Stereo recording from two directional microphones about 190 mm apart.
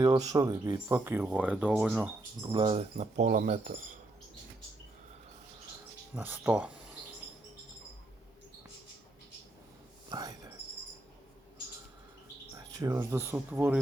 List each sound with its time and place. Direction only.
0.0 s speech: 20° right (ahead or behind)
2.4 s speech: 25° right (ahead or behind); by 3.9 s 45° right (ahead or behind)
6.1 s speech: 10° right (ahead or behind)
10.1 s a sound: 20° right (ahead or behind)
12.7 s speech: 15° right (ahead or behind)